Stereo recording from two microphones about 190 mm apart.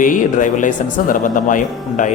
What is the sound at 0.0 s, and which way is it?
Speech, 45° left (ahead or behind).